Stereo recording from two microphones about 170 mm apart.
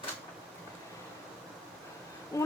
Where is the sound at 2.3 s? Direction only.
20° left (ahead or behind).